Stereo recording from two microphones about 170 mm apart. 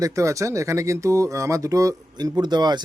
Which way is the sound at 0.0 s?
20° right (ahead or behind).